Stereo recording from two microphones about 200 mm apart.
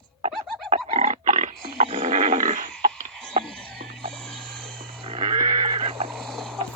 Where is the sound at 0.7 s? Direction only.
30° right (ahead or behind).